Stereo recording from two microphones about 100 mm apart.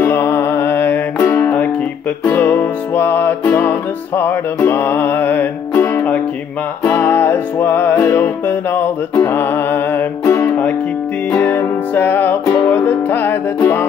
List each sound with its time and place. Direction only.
0.0 s music: 20° left (ahead or behind)